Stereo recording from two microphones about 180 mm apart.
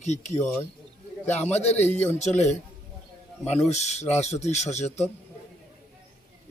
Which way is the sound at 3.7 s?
40° left (ahead or behind).